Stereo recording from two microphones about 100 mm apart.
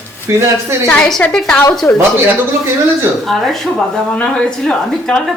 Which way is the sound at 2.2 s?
20° right (ahead or behind).